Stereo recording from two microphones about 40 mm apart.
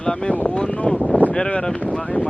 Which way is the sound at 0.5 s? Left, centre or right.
Left.